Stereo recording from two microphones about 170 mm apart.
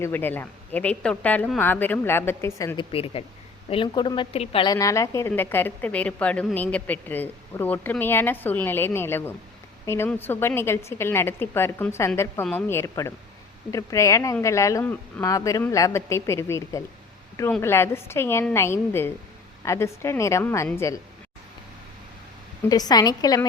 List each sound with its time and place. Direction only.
0.0 s speech: 10° left (ahead or behind)
2.7 s a woman's voice: 35° left (ahead or behind); by 20.7 s 15° left (ahead or behind)
22.7 s a woman's voice: 25° left (ahead or behind)